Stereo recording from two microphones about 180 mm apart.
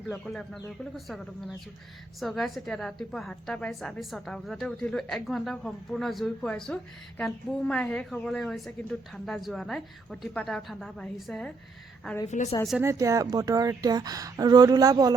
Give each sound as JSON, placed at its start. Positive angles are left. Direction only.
{"t": 0.1, "sound": "a woman's voice", "side_deg": 5}
{"t": 12.3, "sound": "a woman's voice", "side_deg": 40}
{"t": 12.8, "sound": "speech", "side_deg": -15}